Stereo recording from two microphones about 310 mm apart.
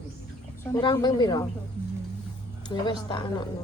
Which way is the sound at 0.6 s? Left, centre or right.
Centre.